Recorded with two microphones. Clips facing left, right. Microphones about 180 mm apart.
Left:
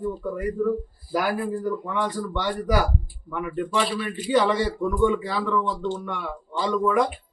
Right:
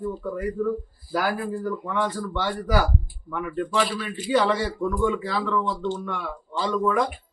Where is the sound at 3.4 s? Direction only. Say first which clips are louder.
Even; 5° left (ahead or behind).